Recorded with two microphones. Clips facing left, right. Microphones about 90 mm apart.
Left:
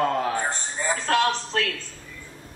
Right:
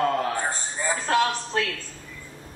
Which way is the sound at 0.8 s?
20° right (ahead or behind).